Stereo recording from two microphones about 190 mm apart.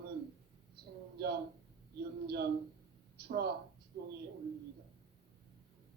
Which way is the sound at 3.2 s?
55° right (ahead or behind).